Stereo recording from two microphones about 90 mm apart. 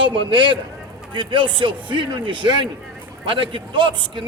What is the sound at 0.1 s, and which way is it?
A man's voice, 65° right (ahead or behind).